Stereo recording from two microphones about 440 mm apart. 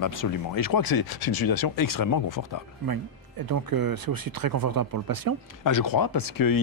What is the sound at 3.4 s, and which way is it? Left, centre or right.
Speech, right.